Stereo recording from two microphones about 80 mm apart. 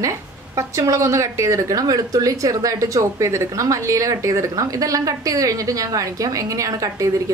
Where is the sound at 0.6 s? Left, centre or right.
Right.